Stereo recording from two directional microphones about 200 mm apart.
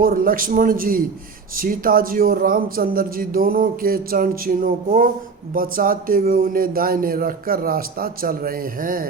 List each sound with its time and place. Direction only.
0.0 s speech: 45° right (ahead or behind)